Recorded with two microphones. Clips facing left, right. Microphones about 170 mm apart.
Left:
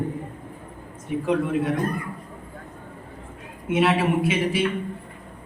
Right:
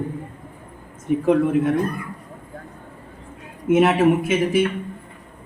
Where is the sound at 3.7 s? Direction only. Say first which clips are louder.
Right 5 dB; 45° right (ahead or behind).